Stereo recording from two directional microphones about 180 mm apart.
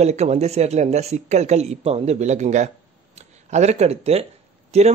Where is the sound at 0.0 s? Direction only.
40° right (ahead or behind).